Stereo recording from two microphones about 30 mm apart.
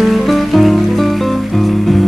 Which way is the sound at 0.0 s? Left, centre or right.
Centre.